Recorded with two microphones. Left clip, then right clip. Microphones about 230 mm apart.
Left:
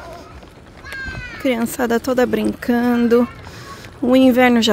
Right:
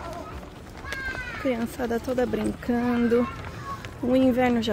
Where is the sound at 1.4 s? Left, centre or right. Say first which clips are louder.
Left 9 dB; left.